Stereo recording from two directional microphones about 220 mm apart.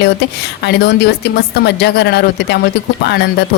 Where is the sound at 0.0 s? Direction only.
50° left (ahead or behind).